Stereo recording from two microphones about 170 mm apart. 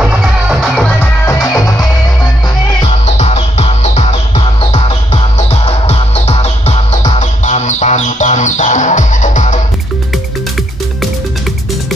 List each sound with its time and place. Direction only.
0.0 s music: 5° right (ahead or behind)
1.2 s music: 20° left (ahead or behind)
3.1 s music: 40° left (ahead or behind)